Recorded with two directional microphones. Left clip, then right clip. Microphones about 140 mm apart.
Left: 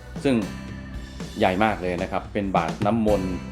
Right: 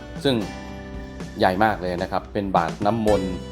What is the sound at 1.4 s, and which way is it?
Speech, 20° right (ahead or behind).